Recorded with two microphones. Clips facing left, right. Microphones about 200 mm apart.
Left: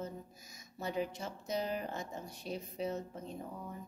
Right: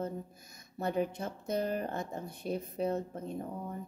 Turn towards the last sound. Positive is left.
turn(degrees=-55)  # may be behind; listen again after turning